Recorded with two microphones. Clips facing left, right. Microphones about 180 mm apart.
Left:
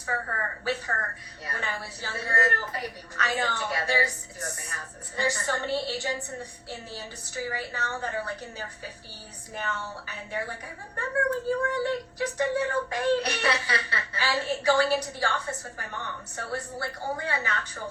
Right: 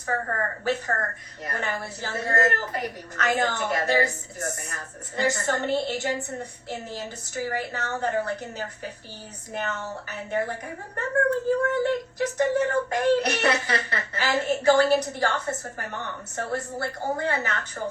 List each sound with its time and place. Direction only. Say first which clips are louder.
0.0 s a woman's voice: right 5 dB; 45° right (ahead or behind)
9.6 s a woman's voice: right 3 dB; 45° right (ahead or behind)